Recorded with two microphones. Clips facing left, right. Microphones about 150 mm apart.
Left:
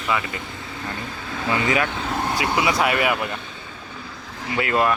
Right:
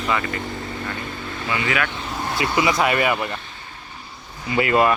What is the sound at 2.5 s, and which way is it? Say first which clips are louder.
Speech: right 2 dB; centre (ahead or behind).